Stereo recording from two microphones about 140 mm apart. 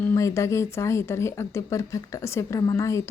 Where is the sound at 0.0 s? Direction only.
20° left (ahead or behind).